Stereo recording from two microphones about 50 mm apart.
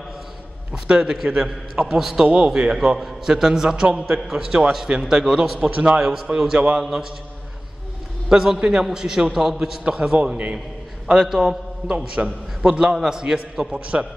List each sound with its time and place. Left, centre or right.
0.8 s a man's voice: centre
2.2 s a man's voice: centre
8.3 s a man's voice: centre
9.8 s a man's voice: right
11.1 s a man's voice: centre